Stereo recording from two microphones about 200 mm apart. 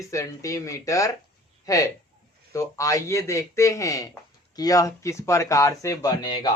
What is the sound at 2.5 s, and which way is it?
Speech, 15° left (ahead or behind).